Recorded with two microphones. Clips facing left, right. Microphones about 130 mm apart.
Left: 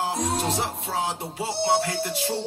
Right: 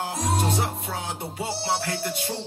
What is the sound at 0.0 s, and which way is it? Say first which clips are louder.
Music: left 1 dB; 25° left (ahead or behind).